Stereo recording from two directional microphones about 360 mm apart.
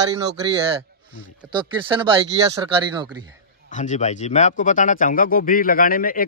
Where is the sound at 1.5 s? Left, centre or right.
Centre.